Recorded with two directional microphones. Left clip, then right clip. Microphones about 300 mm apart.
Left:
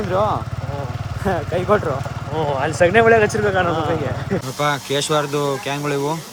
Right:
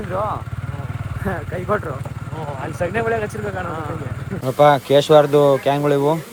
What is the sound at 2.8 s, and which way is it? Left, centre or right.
Speech, left.